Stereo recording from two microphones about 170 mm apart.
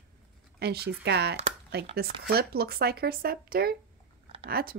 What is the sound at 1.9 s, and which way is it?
Speech, 65° right (ahead or behind).